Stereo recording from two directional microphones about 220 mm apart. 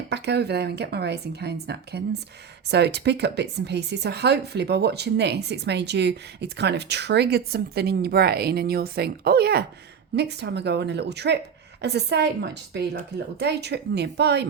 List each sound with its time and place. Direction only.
0.1 s speech: 50° right (ahead or behind)